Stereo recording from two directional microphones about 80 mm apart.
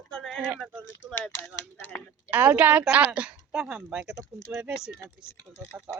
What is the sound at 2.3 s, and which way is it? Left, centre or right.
Speech, right.